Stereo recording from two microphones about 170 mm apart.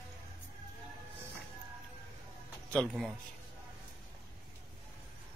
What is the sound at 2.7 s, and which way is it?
Speech, centre (ahead or behind).